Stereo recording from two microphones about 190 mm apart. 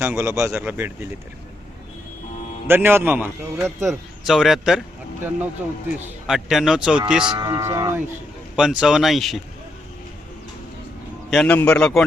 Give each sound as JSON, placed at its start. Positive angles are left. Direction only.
{"t": 0.0, "sound": "a man's voice", "side_deg": -15}
{"t": 2.6, "sound": "a man's voice", "side_deg": -10}
{"t": 3.8, "sound": "a man's voice", "side_deg": 0}
{"t": 7.3, "sound": "a man's voice", "side_deg": -20}
{"t": 8.5, "sound": "a man's voice", "side_deg": -5}
{"t": 11.3, "sound": "a man's voice", "side_deg": 5}